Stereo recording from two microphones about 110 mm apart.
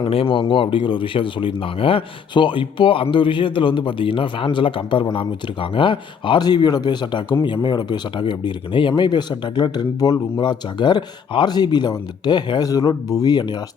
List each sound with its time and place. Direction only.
0.1 s speech: 55° left (ahead or behind); by 13.6 s 40° left (ahead or behind)